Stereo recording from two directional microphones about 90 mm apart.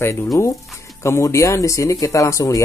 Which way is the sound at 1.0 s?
30° left (ahead or behind).